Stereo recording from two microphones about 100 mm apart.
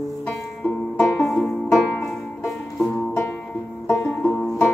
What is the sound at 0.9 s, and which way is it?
Music, 20° left (ahead or behind).